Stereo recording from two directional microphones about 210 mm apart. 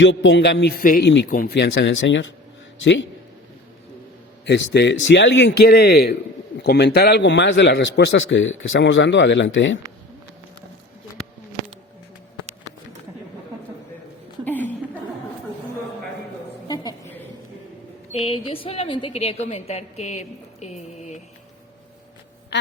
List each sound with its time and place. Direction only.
0.0 s a man's voice: 60° left (ahead or behind)
4.4 s a man's voice: 55° left (ahead or behind)
14.4 s chuckle: 10° left (ahead or behind)
16.6 s a sound: 20° left (ahead or behind)
18.1 s a woman's voice: 25° left (ahead or behind)